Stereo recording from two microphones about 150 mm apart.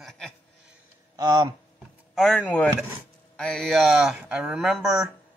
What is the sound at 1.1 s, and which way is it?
Speech, 25° right (ahead or behind).